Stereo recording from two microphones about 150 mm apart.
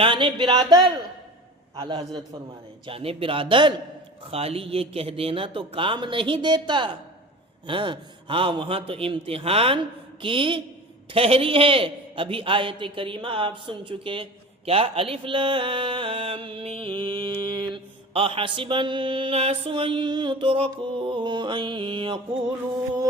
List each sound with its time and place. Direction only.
0.0 s a man's voice: 35° right (ahead or behind)